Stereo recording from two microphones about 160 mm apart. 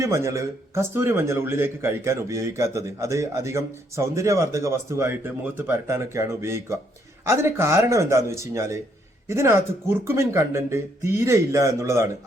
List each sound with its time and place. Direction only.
0.0 s a man's voice: 20° right (ahead or behind)